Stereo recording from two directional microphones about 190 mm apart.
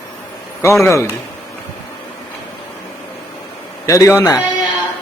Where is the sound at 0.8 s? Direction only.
15° left (ahead or behind).